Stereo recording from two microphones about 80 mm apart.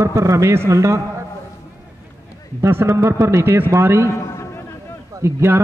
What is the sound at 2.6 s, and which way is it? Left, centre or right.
A man's voice, right.